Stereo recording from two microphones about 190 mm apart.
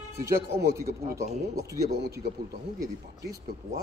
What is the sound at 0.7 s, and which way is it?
A man's voice, 15° right (ahead or behind).